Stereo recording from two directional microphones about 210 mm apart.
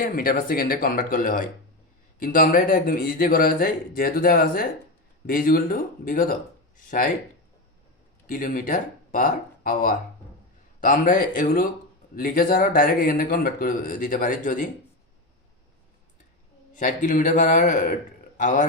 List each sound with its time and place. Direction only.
0.0 s a man's voice: 45° left (ahead or behind)
6.7 s a sound: 40° left (ahead or behind)
8.3 s speech: 40° left (ahead or behind)
16.7 s speech: 40° left (ahead or behind)